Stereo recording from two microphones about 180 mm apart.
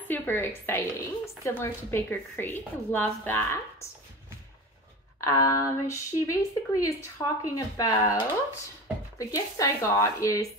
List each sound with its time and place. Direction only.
0.1 s a woman's voice: 10° left (ahead or behind)
5.2 s speech: 20° left (ahead or behind)
9.2 s a woman's voice: 20° left (ahead or behind)